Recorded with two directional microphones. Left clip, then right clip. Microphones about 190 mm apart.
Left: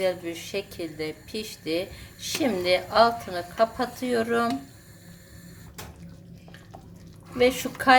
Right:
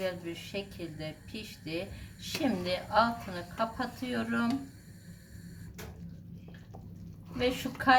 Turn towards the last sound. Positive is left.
turn(degrees=35)  # may be behind; listen again after turning